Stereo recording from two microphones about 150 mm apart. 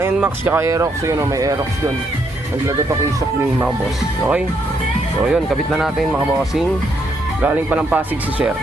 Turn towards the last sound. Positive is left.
turn(degrees=-10)  # may be behind; listen again after turning